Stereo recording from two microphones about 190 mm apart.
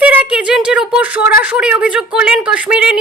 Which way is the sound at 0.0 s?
10° right (ahead or behind).